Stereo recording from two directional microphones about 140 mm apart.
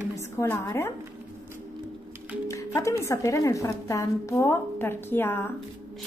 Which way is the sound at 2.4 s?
20° left (ahead or behind).